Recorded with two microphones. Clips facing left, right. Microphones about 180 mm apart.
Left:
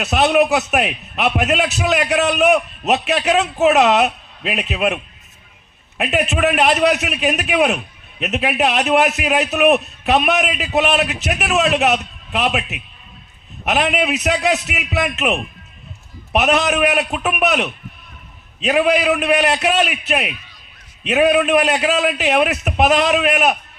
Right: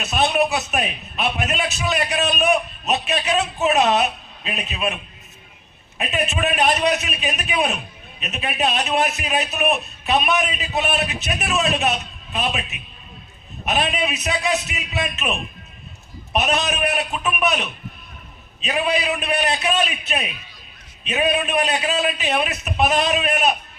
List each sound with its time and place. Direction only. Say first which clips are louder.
0.0 s a man's voice: left 5 dB; 80° left
6.0 s a man's voice: left 5 dB; 75° left (ahead or behind)